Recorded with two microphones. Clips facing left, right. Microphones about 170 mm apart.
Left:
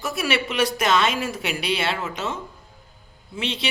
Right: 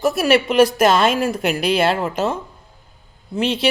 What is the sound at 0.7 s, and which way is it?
Speech, 50° right (ahead or behind).